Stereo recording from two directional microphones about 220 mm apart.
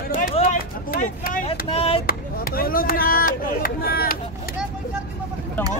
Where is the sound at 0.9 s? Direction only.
40° left (ahead or behind).